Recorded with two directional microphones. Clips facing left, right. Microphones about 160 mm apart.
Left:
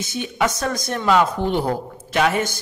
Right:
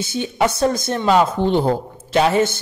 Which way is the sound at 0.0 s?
30° right (ahead or behind).